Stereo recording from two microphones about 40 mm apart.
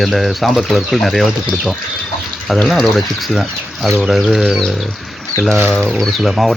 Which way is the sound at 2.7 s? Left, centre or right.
Centre.